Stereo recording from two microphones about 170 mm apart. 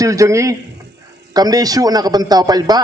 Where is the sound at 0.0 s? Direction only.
20° right (ahead or behind).